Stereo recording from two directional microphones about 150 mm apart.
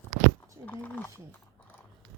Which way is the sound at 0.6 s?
10° left (ahead or behind).